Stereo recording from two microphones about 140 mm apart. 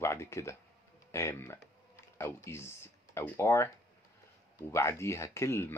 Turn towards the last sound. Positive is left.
turn(degrees=20)  # may be behind; listen again after turning